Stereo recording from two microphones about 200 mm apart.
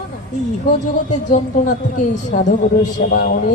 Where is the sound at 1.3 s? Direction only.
40° left (ahead or behind).